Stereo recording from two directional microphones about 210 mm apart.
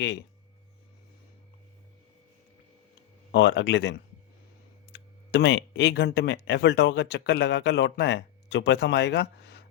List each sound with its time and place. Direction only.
0.0 s speech: 55° left (ahead or behind)
3.3 s speech: 60° left (ahead or behind)